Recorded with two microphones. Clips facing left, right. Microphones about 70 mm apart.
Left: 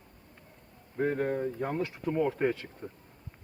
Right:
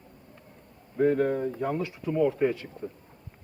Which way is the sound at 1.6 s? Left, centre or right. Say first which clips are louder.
Right 3 dB; left.